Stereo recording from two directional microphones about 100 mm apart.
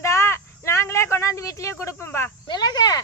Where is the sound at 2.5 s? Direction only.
45° left (ahead or behind).